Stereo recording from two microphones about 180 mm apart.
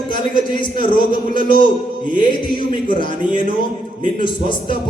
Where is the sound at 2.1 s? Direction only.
25° left (ahead or behind).